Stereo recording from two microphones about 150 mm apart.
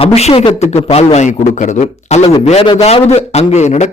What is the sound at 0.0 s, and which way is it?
A man's voice, 45° left (ahead or behind).